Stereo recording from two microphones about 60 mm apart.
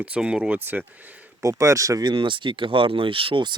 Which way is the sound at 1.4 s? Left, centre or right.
Right.